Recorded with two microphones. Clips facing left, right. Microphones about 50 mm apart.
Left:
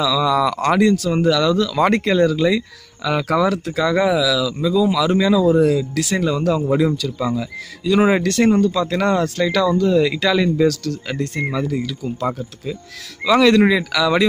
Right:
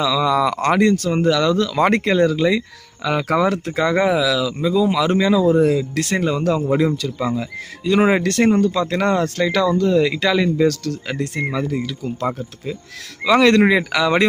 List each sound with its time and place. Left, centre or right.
0.0 s speech: right
0.6 s speech: right
6.1 s speech: right
10.0 s speech: right
10.7 s speech: right
11.5 s speech: right
13.2 s speech: right
13.6 s speech: right